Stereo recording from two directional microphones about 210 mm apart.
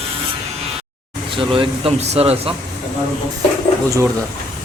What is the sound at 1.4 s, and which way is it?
Speech, 25° right (ahead or behind).